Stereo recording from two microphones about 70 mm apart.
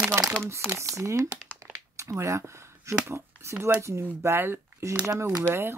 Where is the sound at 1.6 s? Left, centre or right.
Right.